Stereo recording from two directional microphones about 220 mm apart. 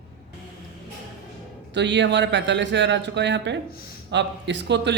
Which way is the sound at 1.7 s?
55° right (ahead or behind).